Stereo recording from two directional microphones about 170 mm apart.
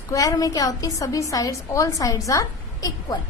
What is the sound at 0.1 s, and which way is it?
A woman's voice, 20° left (ahead or behind).